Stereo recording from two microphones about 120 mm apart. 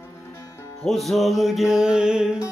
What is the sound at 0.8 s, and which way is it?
Music, centre (ahead or behind).